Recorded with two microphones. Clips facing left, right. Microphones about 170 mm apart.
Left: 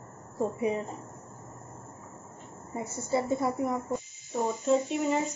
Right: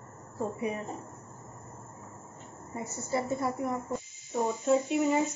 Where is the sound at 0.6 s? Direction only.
20° left (ahead or behind).